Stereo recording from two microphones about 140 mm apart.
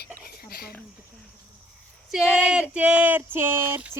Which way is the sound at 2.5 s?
10° right (ahead or behind).